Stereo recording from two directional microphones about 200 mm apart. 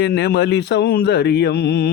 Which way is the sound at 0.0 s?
55° left (ahead or behind).